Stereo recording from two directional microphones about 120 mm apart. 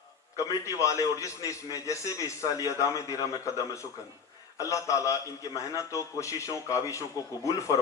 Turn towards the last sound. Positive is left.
turn(degrees=25)  # may be behind; listen again after turning